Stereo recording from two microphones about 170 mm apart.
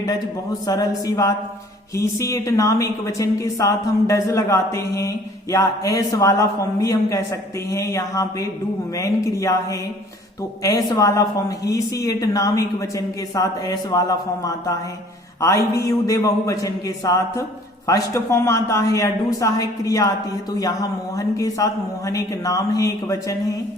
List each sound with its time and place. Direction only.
0.7 s a woman's voice: 20° left (ahead or behind)
10.6 s a woman's voice: 20° left (ahead or behind)